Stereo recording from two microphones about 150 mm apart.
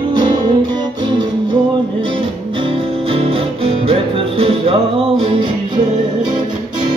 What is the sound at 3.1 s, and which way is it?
Music, 40° right (ahead or behind).